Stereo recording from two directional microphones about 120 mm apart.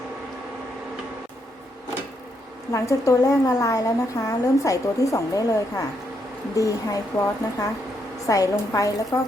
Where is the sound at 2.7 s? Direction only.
25° left (ahead or behind).